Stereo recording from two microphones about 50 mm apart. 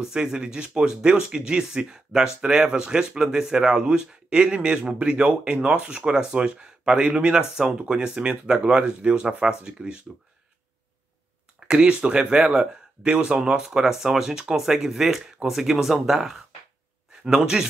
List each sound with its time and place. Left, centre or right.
0.0 s speech: centre
11.6 s a man's voice: right